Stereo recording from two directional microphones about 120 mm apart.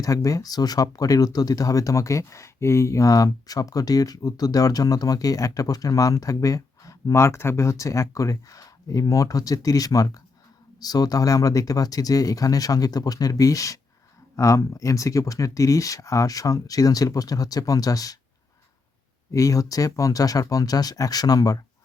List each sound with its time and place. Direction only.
0.0 s speech: 30° left (ahead or behind)
19.3 s speech: 25° left (ahead or behind)